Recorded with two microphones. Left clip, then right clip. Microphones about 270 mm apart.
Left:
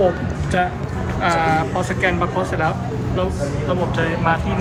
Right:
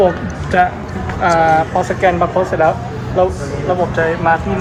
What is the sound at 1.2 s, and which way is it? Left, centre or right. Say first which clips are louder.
Speech: right 6 dB; centre.